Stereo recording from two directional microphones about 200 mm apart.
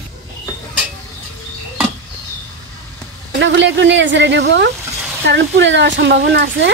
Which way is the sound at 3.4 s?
65° right (ahead or behind).